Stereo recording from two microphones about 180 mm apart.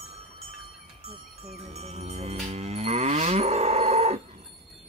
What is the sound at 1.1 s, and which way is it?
Livestock, 35° right (ahead or behind).